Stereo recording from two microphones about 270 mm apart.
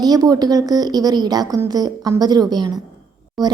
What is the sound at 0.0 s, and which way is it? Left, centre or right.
A woman's voice, centre.